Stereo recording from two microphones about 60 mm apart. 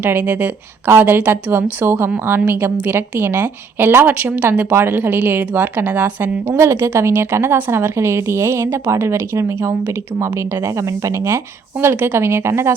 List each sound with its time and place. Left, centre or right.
0.0 s a woman's voice: right
4.4 s a woman's voice: right
6.6 s speech: right
10.8 s speech: right
11.8 s speech: right